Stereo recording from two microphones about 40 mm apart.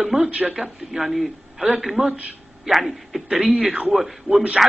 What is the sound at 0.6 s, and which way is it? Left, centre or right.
A man's voice, centre.